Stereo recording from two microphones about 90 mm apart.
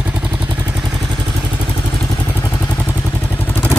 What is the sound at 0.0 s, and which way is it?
Vehicle, 15° right (ahead or behind).